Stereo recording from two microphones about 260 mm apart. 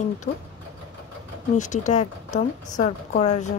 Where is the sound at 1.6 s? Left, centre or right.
Left.